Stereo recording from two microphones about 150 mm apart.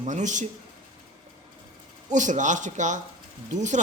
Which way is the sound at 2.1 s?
55° right (ahead or behind).